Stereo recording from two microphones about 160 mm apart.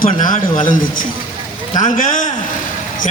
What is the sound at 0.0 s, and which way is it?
Speech, 55° left (ahead or behind).